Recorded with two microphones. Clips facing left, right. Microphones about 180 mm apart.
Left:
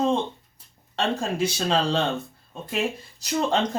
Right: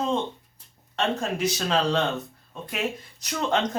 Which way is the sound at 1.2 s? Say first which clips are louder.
Left 1 dB; 30° left (ahead or behind).